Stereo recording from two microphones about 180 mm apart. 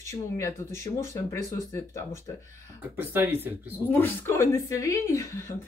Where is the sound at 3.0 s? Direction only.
10° right (ahead or behind).